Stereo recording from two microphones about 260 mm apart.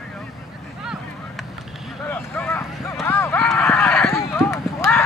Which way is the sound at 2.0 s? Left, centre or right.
Centre.